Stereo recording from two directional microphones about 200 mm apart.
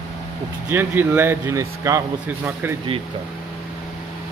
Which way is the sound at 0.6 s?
10° right (ahead or behind).